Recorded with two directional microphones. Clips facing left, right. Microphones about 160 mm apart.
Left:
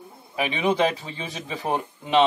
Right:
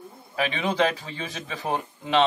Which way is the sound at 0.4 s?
15° left (ahead or behind).